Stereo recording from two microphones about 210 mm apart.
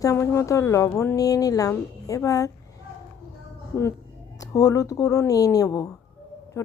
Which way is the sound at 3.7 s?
15° left (ahead or behind).